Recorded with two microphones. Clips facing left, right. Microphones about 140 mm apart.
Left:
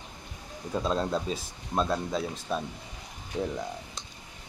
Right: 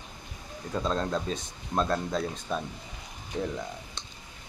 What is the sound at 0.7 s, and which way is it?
Speech, 10° left (ahead or behind).